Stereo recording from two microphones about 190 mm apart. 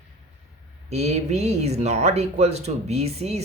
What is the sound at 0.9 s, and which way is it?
Speech, 35° right (ahead or behind).